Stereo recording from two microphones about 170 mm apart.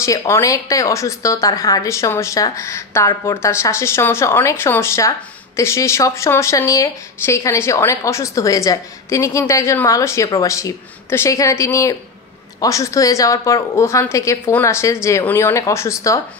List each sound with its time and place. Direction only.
0.0 s speech: 20° left (ahead or behind)